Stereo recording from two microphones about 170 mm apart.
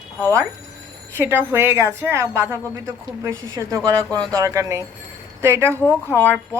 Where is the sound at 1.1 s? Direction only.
10° right (ahead or behind).